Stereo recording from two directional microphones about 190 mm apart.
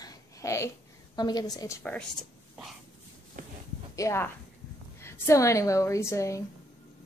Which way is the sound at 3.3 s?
45° right (ahead or behind).